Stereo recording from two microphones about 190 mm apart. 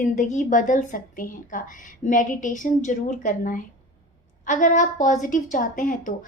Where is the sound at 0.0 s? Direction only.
40° left (ahead or behind).